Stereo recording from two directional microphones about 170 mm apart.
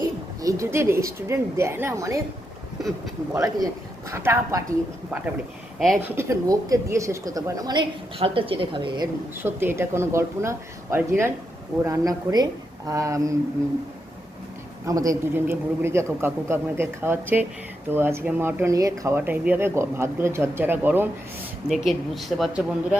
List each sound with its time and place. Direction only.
0.4 s speech: 20° right (ahead or behind)
3.3 s a woman's voice: 20° right (ahead or behind)
6.1 s a woman's voice: 15° right (ahead or behind)
9.4 s a woman's voice: 10° right (ahead or behind)
14.8 s speech: 20° right (ahead or behind)
21.7 s speech: centre (ahead or behind)